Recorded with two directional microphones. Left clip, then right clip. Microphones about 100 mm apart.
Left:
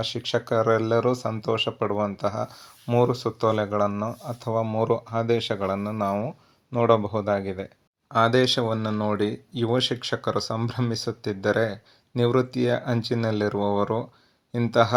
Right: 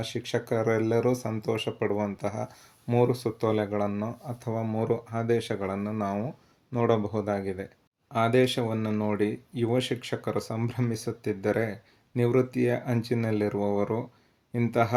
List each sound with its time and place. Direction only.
0.0 s speech: 10° left (ahead or behind)